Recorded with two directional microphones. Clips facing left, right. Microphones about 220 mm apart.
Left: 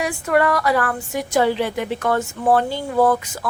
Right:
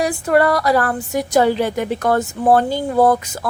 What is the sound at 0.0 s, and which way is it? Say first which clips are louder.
A woman's voice: right 3 dB; 35° right (ahead or behind).